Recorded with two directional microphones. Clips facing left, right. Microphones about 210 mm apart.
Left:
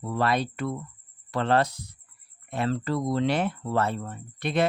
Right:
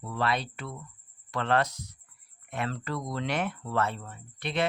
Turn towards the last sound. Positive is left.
turn(degrees=45)  # may be behind; listen again after turning